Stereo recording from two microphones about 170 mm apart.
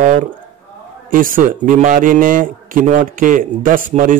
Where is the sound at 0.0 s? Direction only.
50° right (ahead or behind).